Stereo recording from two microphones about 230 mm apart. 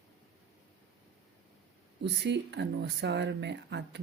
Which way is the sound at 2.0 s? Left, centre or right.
Right.